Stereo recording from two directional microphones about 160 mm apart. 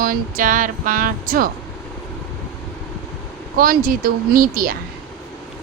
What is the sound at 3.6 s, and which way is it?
Speech, 65° right (ahead or behind).